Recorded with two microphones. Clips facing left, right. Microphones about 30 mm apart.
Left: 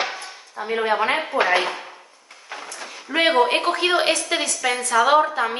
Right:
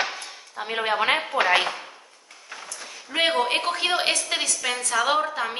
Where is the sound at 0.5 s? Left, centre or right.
Right.